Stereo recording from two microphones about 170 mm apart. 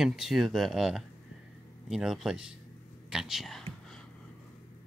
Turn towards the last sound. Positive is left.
turn(degrees=0)  # may be behind; listen again after turning